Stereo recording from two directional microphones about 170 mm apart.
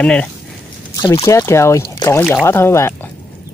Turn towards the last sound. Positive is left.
turn(degrees=15)  # may be behind; listen again after turning